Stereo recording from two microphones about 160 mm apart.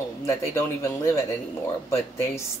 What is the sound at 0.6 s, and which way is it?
Speech, 15° left (ahead or behind).